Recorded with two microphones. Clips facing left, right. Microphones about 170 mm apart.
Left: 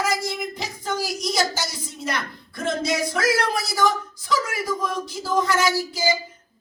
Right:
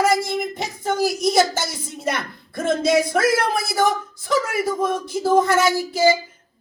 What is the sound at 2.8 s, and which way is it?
A woman's voice, 55° right (ahead or behind).